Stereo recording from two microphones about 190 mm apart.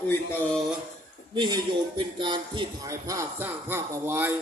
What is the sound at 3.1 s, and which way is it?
Speech, 10° right (ahead or behind).